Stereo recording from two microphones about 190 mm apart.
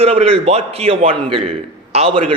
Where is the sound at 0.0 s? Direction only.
30° right (ahead or behind).